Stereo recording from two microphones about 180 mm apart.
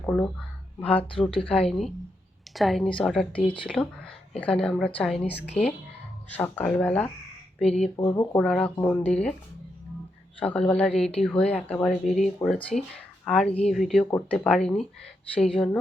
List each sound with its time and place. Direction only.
0.0 s speech: 5° left (ahead or behind)
6.3 s speech: 10° left (ahead or behind)
7.6 s speech: 35° left (ahead or behind)
7.9 s speech: 20° left (ahead or behind)
8.4 s speech: 5° left (ahead or behind)
10.4 s speech: 5° left (ahead or behind)